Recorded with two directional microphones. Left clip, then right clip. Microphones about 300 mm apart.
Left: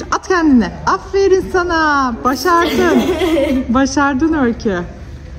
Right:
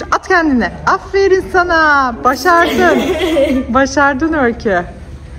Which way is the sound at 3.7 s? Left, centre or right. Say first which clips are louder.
Right 4 dB; left.